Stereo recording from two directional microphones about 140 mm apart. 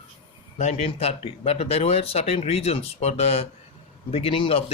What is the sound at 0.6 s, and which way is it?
Speech, 50° left (ahead or behind).